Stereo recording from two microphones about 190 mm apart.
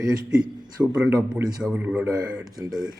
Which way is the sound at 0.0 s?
15° right (ahead or behind).